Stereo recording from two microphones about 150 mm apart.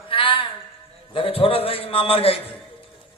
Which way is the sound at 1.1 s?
40° left (ahead or behind).